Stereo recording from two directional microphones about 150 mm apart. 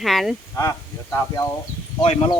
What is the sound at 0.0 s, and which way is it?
Speech, centre (ahead or behind).